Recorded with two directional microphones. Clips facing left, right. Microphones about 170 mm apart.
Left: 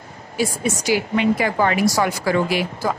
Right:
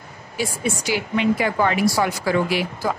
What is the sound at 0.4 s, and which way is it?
Speech, 40° left (ahead or behind).